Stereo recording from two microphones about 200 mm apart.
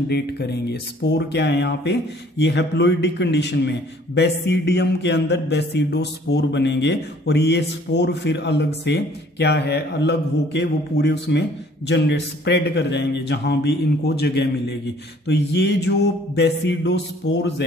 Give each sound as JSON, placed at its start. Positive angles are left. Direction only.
{"t": 0.1, "sound": "speech", "side_deg": 55}